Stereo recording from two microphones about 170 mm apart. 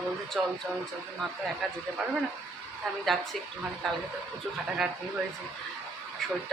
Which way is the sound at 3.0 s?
Centre (ahead or behind).